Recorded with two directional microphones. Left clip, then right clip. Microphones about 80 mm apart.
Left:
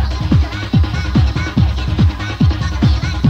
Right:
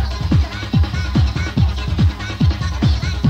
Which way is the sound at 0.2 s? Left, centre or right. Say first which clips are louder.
Left 4 dB; left.